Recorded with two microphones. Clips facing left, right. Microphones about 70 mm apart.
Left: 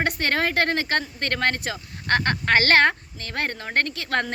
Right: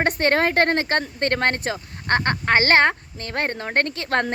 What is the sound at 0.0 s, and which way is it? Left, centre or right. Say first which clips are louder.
Speech: right 4 dB; right.